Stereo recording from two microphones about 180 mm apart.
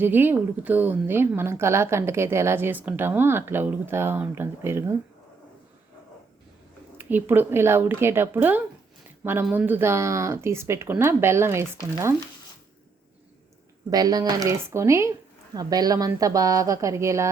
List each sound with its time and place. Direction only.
0.0 s speech: 10° right (ahead or behind)
7.0 s speech: 10° right (ahead or behind)
13.9 s a woman's voice: 20° right (ahead or behind)